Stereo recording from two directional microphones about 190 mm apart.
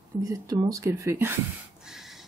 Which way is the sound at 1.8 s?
Centre (ahead or behind).